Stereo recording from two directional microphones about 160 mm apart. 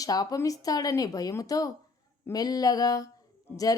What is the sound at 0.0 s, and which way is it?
Speech, 25° left (ahead or behind).